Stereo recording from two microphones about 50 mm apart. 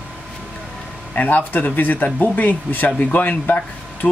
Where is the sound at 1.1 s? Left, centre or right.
Left.